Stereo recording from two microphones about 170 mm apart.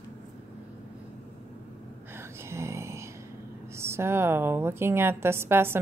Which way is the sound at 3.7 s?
15° right (ahead or behind).